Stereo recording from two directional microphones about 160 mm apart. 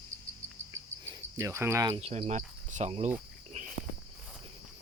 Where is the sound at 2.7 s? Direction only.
45° right (ahead or behind).